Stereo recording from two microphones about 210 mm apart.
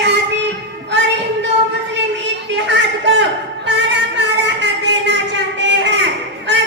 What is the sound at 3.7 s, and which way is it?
Music, 55° right (ahead or behind).